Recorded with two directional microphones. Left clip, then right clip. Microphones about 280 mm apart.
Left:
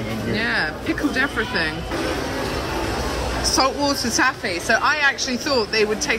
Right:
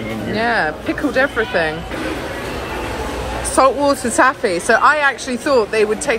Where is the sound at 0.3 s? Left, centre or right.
Centre.